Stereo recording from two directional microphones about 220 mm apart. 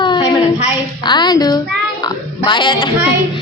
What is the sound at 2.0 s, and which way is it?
Music, 20° left (ahead or behind).